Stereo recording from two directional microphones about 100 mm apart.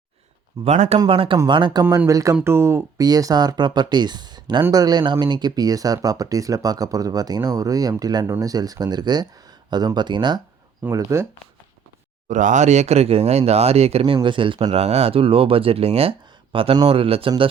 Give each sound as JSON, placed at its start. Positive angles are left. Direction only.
{"t": 0.6, "sound": "speech", "side_deg": -90}
{"t": 0.9, "sound": "speech", "side_deg": -65}
{"t": 1.5, "sound": "speech", "side_deg": -50}
{"t": 2.0, "sound": "speech", "side_deg": -35}
{"t": 3.0, "sound": "speech", "side_deg": -40}
{"t": 10.9, "sound": "speech", "side_deg": -30}
{"t": 12.8, "sound": "speech", "side_deg": -90}
{"t": 14.3, "sound": "speech", "side_deg": -55}
{"t": 14.8, "sound": "speech", "side_deg": -90}